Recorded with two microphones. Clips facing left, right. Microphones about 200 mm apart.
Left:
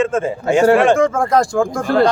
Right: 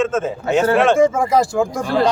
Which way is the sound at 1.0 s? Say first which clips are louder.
Even; 5° right (ahead or behind).